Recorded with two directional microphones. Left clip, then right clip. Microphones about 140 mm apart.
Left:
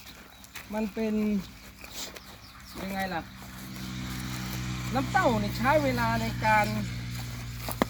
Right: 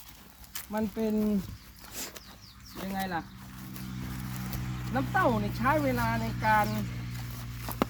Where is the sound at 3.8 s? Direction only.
65° left (ahead or behind); by 4.9 s 90° left.